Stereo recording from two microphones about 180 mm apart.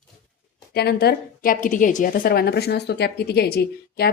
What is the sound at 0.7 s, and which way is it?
A woman's voice, 65° left (ahead or behind).